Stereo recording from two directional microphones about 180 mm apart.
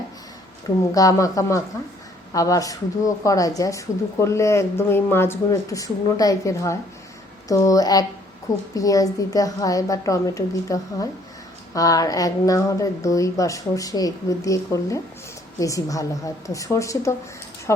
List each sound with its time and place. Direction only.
0.9 s a woman's voice: 20° left (ahead or behind)